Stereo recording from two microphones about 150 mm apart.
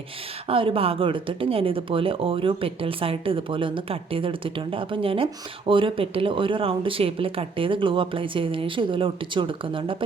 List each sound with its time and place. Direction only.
0.4 s speech: 35° right (ahead or behind)